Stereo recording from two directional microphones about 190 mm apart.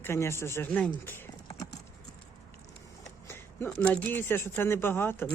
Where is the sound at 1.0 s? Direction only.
20° left (ahead or behind).